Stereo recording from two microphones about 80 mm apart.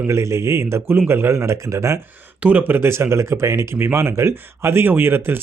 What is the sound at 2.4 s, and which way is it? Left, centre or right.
A man's voice, centre.